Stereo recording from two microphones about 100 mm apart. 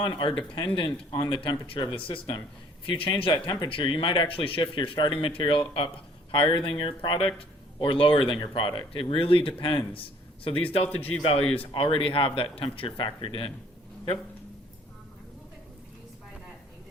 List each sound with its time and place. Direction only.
0.0 s speech: 55° left (ahead or behind)
3.3 s speech: 50° left (ahead or behind); by 8.4 s 65° left (ahead or behind)
8.4 s speech: 55° left (ahead or behind)